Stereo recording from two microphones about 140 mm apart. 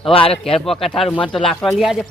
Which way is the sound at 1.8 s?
5° right (ahead or behind).